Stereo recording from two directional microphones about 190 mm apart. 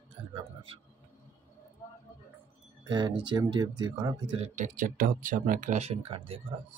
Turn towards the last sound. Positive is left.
turn(degrees=-30)  # may be behind; listen again after turning